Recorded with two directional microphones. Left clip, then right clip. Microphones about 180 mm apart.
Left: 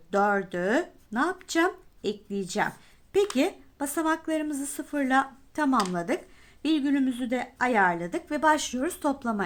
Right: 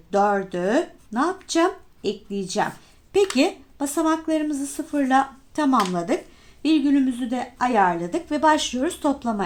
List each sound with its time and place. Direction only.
0.1 s speech: 40° left (ahead or behind)